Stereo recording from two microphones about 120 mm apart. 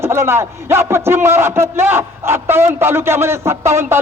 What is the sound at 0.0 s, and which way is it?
A man's voice, 20° right (ahead or behind).